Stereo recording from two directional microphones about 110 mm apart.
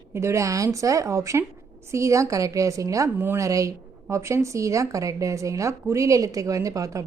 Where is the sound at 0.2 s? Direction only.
25° right (ahead or behind).